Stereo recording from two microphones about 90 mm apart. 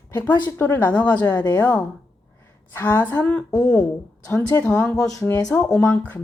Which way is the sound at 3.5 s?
40° left (ahead or behind).